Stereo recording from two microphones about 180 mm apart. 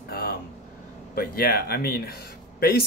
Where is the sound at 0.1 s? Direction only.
55° left (ahead or behind).